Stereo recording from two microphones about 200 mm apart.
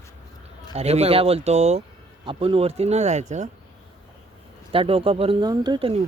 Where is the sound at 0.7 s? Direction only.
30° right (ahead or behind).